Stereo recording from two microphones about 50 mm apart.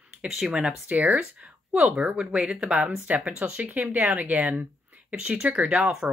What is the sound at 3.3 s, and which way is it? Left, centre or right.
Speech, right.